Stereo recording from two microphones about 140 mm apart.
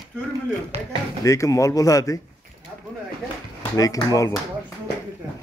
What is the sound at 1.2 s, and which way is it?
Speech, 20° left (ahead or behind).